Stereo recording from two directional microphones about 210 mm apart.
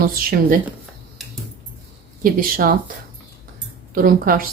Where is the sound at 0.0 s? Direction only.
45° right (ahead or behind).